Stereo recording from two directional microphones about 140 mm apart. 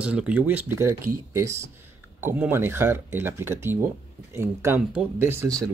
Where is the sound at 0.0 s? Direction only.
10° right (ahead or behind).